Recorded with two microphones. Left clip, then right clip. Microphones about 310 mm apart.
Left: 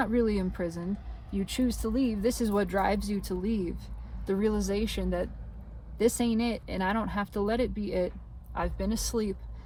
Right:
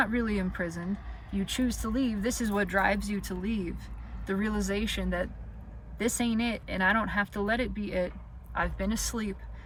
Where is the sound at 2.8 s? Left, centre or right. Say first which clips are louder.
Right 1 dB; centre.